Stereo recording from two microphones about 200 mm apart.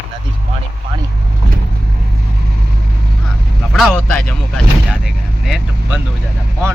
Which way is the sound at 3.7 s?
5° left (ahead or behind).